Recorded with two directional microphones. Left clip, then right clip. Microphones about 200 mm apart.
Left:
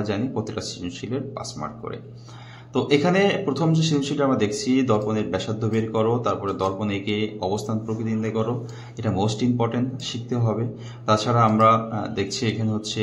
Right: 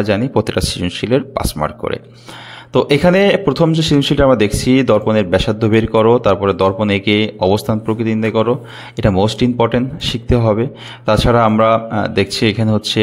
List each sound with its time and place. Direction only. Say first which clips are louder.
0.0 s speech: right 11 dB; 45° right (ahead or behind)